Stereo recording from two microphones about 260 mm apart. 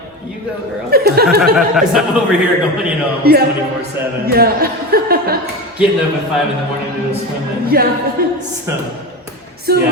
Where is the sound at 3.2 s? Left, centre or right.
Right.